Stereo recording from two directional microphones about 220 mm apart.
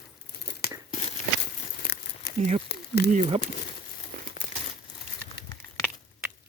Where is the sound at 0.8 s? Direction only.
35° left (ahead or behind).